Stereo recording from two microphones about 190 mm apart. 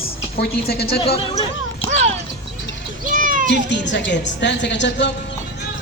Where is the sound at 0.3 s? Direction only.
55° left (ahead or behind).